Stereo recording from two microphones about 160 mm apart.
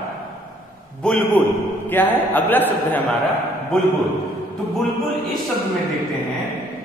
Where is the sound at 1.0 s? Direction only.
5° left (ahead or behind).